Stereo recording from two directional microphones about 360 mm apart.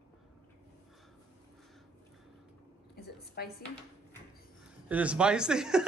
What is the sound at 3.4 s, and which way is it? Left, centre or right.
Speech, left.